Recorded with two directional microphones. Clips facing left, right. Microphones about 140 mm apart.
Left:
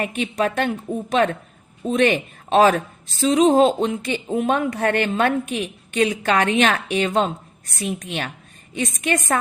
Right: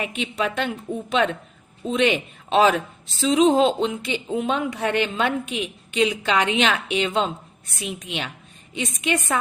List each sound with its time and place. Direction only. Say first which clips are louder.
0.0 s speech: left 4 dB; 45° left (ahead or behind)